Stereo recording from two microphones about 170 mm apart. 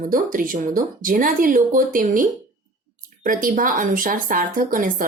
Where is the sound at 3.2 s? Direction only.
55° right (ahead or behind).